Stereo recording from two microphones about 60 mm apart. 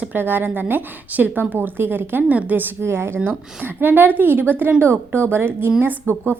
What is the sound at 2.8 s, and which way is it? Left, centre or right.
Speech, right.